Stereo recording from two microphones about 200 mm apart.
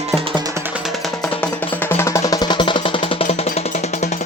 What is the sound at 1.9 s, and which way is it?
Music, 15° left (ahead or behind).